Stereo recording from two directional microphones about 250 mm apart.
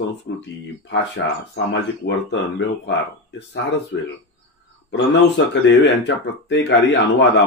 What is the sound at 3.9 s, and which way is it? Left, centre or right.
Speech, left.